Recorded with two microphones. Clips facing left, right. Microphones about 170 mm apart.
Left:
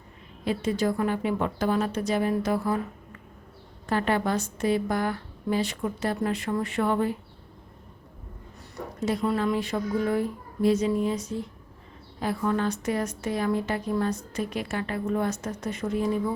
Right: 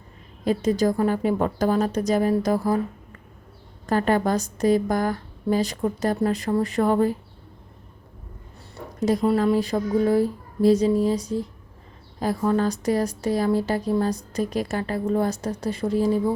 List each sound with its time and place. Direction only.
0.4 s speech: 40° right (ahead or behind)
8.7 s speech: 40° right (ahead or behind)